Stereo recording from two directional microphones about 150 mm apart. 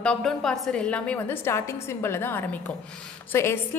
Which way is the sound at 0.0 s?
5° left (ahead or behind).